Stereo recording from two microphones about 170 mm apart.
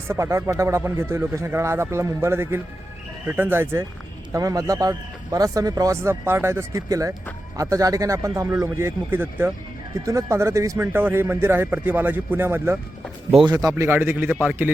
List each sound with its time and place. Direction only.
0.1 s speech: 15° right (ahead or behind)